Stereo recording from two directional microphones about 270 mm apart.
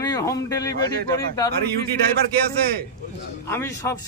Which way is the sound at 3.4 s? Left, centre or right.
Centre.